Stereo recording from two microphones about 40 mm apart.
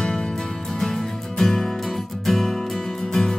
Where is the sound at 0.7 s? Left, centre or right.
Centre.